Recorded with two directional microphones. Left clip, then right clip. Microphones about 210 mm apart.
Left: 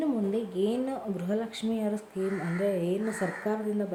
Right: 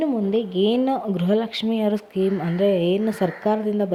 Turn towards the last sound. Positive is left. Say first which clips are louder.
# right 9 dB
turn(degrees=-35)  # may be behind; listen again after turning